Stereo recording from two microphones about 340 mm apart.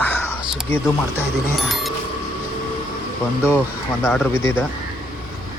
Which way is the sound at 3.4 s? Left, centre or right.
Centre.